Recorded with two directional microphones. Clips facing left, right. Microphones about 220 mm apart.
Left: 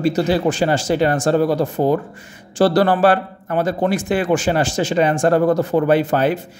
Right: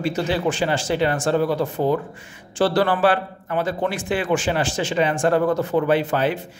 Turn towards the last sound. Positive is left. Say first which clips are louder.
# left 4 dB
turn(degrees=45)  # may be behind; listen again after turning